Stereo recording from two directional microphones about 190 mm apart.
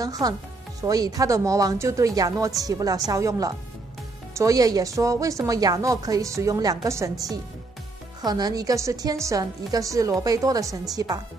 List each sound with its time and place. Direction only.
0.0 s a woman's voice: 20° right (ahead or behind)